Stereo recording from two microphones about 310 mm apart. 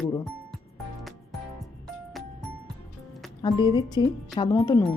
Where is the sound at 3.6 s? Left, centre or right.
Centre.